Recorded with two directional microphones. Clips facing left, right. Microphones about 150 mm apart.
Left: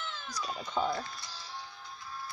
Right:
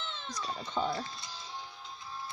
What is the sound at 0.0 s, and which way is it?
Cat, 25° right (ahead or behind).